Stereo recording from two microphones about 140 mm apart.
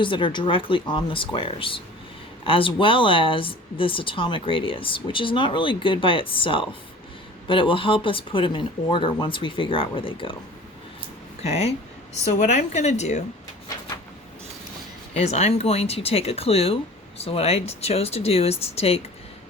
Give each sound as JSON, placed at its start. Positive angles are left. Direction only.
{"t": 0.0, "sound": "a woman's voice", "side_deg": 35}
{"t": 11.4, "sound": "speech", "side_deg": 50}
{"t": 12.3, "sound": "a woman's voice", "side_deg": 60}
{"t": 15.1, "sound": "speech", "side_deg": 50}